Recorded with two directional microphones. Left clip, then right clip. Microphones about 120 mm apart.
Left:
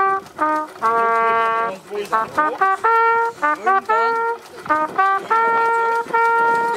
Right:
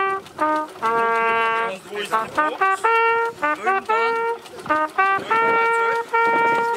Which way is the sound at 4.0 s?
15° right (ahead or behind).